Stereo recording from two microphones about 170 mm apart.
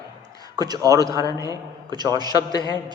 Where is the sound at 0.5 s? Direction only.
25° right (ahead or behind).